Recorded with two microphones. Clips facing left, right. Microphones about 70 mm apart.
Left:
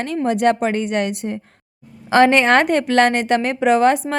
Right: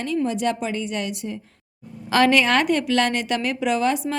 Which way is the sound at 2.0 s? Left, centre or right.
Left.